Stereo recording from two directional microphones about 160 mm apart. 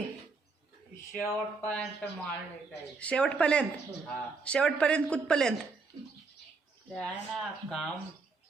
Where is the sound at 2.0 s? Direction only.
10° left (ahead or behind).